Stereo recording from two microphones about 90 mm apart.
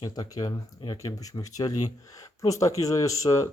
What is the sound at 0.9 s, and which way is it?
Speech, 40° left (ahead or behind).